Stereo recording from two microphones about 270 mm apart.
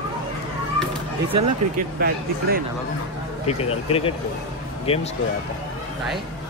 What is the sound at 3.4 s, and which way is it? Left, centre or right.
Speech, left.